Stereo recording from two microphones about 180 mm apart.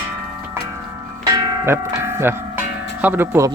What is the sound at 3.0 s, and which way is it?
Speech, 10° right (ahead or behind).